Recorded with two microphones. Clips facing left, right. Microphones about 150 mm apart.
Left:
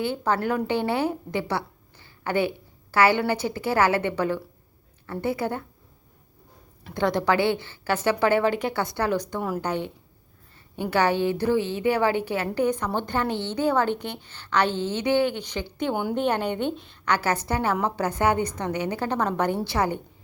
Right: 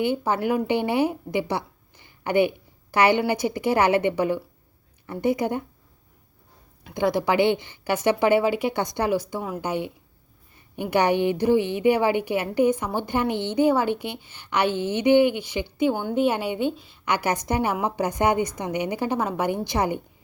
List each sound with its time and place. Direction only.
0.0 s a woman's voice: 15° right (ahead or behind)
6.8 s a woman's voice: 10° right (ahead or behind)